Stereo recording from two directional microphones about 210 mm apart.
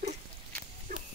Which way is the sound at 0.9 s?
40° right (ahead or behind).